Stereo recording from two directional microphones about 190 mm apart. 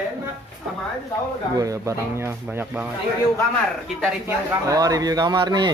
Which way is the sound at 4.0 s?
5° right (ahead or behind).